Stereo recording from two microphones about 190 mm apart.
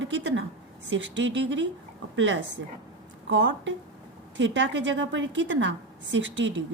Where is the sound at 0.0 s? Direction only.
75° right (ahead or behind).